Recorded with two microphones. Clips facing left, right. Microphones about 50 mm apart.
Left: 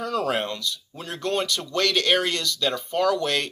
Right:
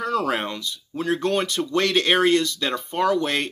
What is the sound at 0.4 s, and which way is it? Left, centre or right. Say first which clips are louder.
Speech: left 1 dB; right.